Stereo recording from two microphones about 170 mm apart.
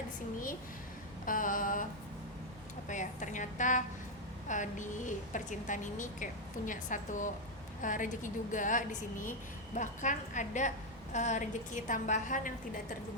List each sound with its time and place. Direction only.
1.2 s a woman's voice: 55° left (ahead or behind)
2.9 s a woman's voice: 50° left (ahead or behind)